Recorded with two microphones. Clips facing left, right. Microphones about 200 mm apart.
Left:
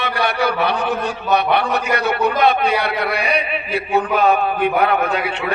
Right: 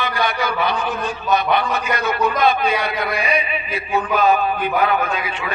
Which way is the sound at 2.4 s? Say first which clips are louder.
Left 2 dB; 65° left (ahead or behind).